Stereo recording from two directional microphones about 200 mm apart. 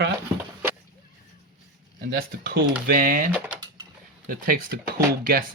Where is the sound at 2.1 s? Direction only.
50° right (ahead or behind).